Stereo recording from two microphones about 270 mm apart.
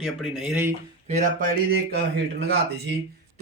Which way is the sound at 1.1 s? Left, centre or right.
Right.